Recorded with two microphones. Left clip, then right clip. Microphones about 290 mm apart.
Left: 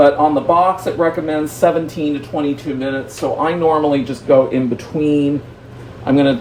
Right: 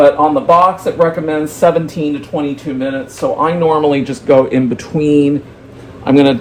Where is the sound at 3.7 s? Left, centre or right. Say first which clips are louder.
Right 2 dB; right.